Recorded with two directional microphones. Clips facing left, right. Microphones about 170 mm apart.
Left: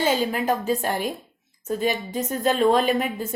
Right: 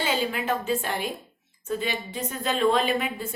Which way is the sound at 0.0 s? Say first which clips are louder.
Left 4 dB; 40° left (ahead or behind).